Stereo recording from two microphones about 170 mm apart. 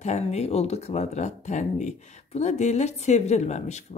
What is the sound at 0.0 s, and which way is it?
Speech, 40° left (ahead or behind).